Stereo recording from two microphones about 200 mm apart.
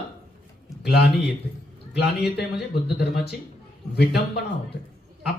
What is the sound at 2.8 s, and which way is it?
A man's voice, 55° left (ahead or behind).